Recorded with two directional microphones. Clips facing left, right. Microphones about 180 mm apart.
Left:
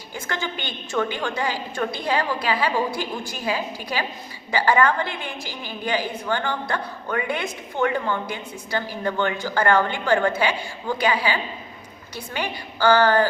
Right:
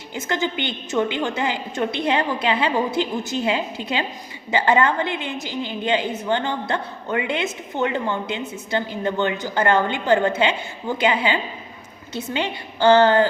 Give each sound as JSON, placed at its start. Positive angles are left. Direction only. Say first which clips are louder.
{"t": 0.1, "sound": "a woman's voice", "louder": "right 5 dB", "side_deg": -20}